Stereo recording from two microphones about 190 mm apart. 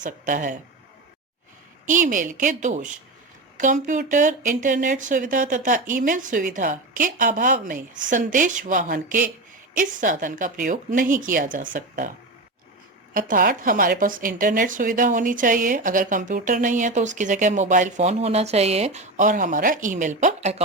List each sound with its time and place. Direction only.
0.0 s a woman's voice: 45° right (ahead or behind)
1.9 s a woman's voice: 45° right (ahead or behind)
13.1 s a woman's voice: 45° right (ahead or behind)